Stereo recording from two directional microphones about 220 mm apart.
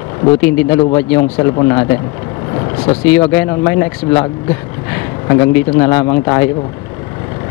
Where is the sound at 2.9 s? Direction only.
15° left (ahead or behind).